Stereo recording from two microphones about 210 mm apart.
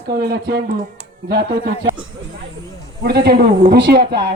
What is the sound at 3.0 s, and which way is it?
Speech, 50° right (ahead or behind).